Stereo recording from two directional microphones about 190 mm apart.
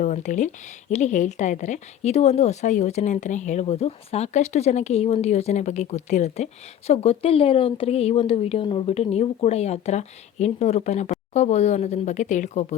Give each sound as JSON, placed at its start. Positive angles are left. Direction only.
{"t": 0.0, "sound": "speech", "side_deg": 40}